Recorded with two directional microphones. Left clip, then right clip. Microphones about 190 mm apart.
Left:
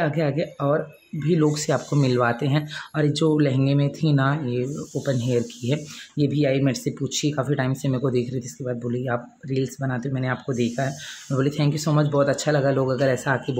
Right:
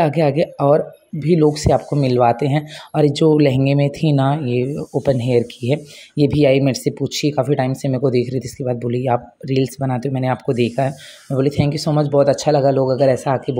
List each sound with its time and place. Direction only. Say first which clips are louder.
0.0 s speech: right 8 dB; 25° right (ahead or behind)
11.3 s speech: right 6 dB; 15° right (ahead or behind)